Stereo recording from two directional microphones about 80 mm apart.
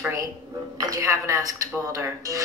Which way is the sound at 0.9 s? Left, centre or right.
Right.